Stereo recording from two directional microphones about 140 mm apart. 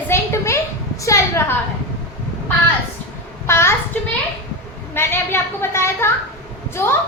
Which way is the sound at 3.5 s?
20° left (ahead or behind).